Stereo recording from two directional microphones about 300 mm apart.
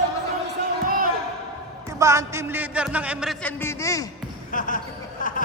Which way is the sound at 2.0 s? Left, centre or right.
Centre.